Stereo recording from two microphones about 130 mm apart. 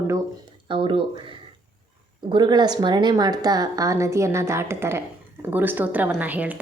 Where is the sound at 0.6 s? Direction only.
40° right (ahead or behind).